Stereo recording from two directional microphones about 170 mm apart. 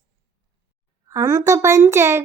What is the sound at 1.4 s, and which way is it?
Speech, 20° right (ahead or behind).